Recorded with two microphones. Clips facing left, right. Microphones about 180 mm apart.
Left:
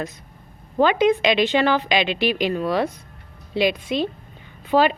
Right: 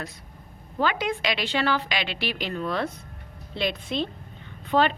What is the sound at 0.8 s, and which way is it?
A woman's voice, 20° left (ahead or behind).